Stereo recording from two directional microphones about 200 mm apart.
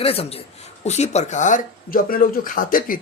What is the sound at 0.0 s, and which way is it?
Speech, 30° left (ahead or behind).